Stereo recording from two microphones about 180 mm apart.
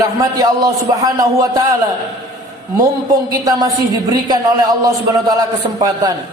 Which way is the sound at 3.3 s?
20° right (ahead or behind).